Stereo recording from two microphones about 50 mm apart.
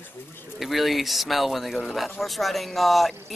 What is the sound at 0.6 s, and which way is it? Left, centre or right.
Speech, centre.